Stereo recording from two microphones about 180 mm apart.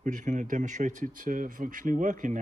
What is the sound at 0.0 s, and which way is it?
Speech, 45° right (ahead or behind).